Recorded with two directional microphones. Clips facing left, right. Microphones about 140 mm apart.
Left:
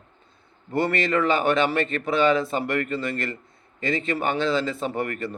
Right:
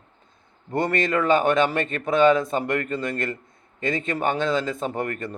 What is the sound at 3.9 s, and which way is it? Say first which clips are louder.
Speech: left 2 dB; 45° right (ahead or behind).